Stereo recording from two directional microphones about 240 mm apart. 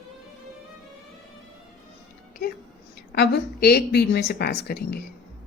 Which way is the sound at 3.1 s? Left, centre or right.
Left.